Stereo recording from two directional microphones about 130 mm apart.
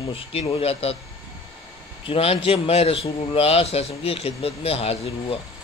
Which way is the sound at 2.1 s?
50° left (ahead or behind).